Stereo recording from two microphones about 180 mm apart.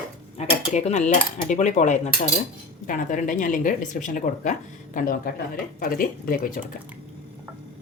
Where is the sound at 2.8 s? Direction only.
45° left (ahead or behind).